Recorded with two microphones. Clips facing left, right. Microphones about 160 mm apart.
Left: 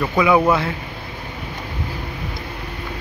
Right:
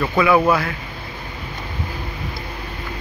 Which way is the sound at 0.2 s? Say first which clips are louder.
Even; 15° left (ahead or behind).